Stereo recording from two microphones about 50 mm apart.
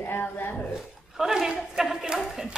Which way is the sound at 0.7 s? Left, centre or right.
Centre.